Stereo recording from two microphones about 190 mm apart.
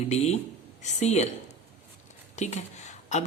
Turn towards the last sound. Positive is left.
turn(degrees=35)  # may be behind; listen again after turning